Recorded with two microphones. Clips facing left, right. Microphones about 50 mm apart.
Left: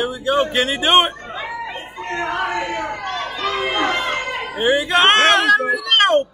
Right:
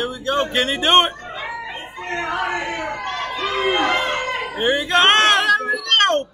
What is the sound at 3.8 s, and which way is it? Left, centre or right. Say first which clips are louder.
Speech: right 1 dB; right.